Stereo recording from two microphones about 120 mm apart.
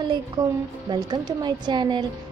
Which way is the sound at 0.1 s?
35° right (ahead or behind).